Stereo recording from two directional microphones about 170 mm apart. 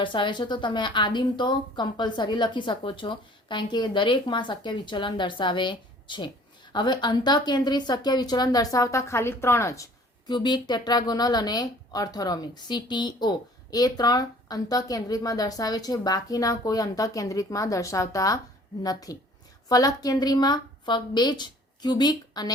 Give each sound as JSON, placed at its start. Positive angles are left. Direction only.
{"t": 0.0, "sound": "speech", "side_deg": 30}